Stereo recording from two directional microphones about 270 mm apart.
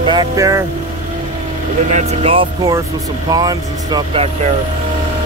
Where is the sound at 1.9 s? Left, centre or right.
Right.